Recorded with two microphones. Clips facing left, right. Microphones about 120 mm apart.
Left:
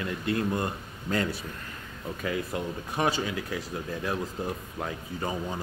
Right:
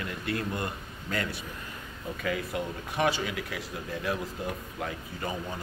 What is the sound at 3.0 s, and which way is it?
Speech, 30° left (ahead or behind).